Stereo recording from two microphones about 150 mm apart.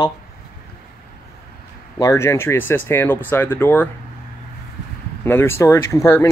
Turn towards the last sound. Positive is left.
turn(degrees=20)  # may be behind; listen again after turning